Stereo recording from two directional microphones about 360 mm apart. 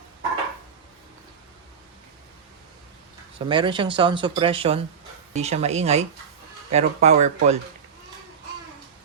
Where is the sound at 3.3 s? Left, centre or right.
Centre.